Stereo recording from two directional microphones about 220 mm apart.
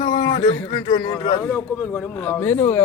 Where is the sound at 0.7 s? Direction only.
20° left (ahead or behind).